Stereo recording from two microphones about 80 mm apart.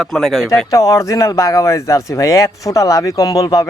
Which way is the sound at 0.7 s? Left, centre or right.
Left.